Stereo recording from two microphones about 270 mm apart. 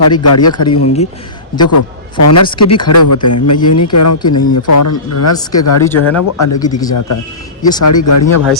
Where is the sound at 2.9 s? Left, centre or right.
Left.